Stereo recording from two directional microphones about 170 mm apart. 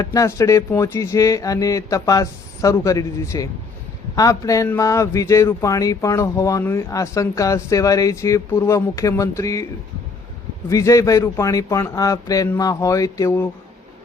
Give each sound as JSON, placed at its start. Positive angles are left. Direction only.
{"t": 0.0, "sound": "a man's voice", "side_deg": 20}
{"t": 10.7, "sound": "a man's voice", "side_deg": 20}